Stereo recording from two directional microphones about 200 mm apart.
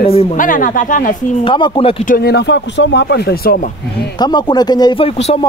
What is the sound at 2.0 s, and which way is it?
Speech, 45° left (ahead or behind).